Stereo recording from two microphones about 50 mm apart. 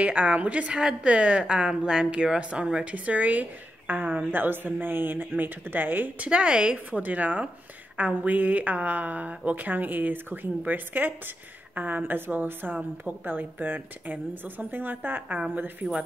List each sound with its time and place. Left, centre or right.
0.0 s a woman's voice: right
6.1 s a woman's voice: right
6.9 s a woman's voice: right
15.2 s a woman's voice: right
15.5 s a woman's voice: right